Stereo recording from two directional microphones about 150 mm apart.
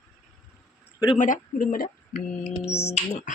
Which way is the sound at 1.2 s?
60° left (ahead or behind).